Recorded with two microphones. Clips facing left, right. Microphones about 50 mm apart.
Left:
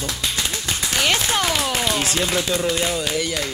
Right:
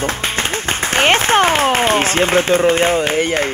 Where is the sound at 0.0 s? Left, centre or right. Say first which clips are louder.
Right 6 dB; right.